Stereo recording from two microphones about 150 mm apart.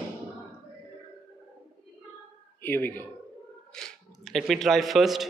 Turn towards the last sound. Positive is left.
turn(degrees=0)  # may be behind; listen again after turning